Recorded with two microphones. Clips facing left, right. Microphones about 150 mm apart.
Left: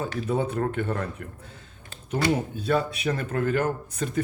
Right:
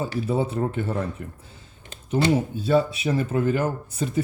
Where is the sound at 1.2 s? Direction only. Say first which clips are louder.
Right 2 dB; 65° left (ahead or behind).